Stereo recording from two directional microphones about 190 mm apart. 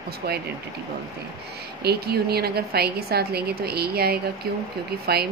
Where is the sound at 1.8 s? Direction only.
55° right (ahead or behind).